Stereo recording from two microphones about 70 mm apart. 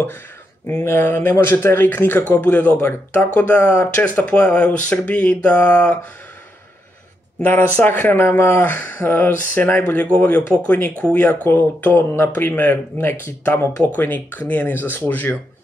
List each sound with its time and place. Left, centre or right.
0.7 s speech: left
7.4 s speech: left